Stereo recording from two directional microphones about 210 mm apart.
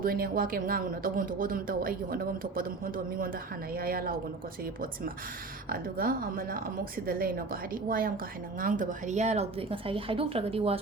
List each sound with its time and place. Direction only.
0.0 s a woman's voice: 45° right (ahead or behind); by 10.8 s 30° right (ahead or behind)